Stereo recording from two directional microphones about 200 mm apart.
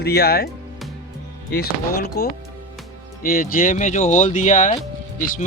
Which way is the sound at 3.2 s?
45° left (ahead or behind).